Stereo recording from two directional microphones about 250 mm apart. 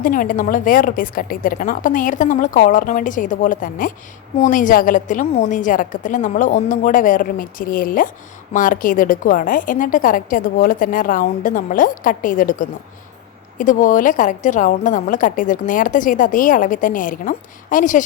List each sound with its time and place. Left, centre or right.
0.0 s a woman's voice: left